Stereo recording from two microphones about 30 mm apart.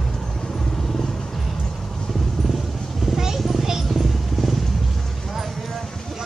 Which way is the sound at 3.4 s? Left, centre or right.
Centre.